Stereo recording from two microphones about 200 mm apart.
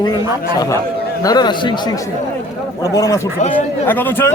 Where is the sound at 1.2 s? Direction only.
20° left (ahead or behind).